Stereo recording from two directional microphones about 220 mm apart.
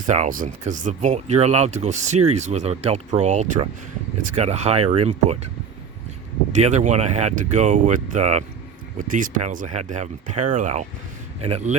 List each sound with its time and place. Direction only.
0.0 s speech: 35° right (ahead or behind)
6.5 s speech: 30° right (ahead or behind)